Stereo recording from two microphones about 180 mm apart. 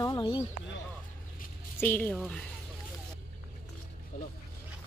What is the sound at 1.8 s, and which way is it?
Speech, 10° left (ahead or behind).